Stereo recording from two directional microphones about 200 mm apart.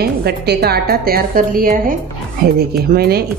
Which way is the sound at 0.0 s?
50° right (ahead or behind).